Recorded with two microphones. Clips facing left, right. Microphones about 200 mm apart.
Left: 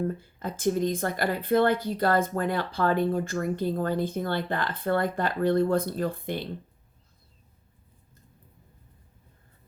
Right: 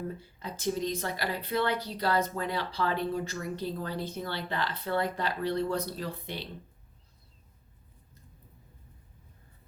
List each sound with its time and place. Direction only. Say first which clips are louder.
0.3 s speech: left 5 dB; 50° left (ahead or behind)